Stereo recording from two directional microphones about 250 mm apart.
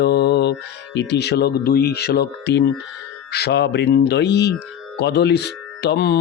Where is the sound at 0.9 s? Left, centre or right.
Left.